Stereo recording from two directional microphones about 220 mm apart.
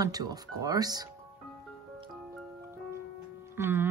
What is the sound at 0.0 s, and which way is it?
Speech, 15° right (ahead or behind).